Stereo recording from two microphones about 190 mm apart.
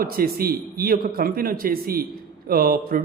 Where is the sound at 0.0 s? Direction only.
50° right (ahead or behind).